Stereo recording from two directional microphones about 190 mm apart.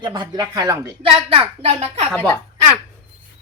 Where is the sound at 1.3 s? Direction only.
30° right (ahead or behind).